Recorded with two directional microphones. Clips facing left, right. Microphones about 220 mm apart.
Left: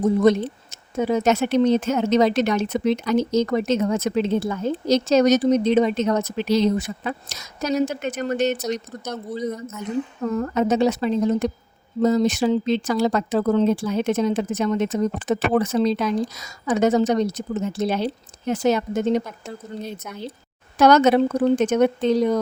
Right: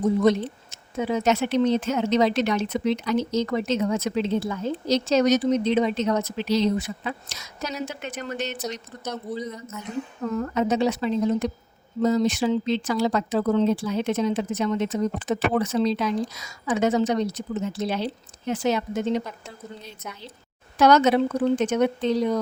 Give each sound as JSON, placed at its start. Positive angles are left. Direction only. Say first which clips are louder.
{"t": 0.2, "sound": "a woman's voice", "louder": "left 3 dB", "side_deg": 50}